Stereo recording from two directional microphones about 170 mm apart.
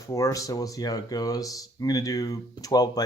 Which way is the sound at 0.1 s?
20° left (ahead or behind).